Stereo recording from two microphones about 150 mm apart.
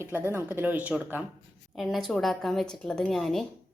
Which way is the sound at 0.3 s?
10° right (ahead or behind).